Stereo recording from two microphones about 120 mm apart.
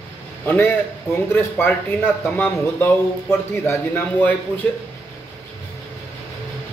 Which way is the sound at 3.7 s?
15° left (ahead or behind).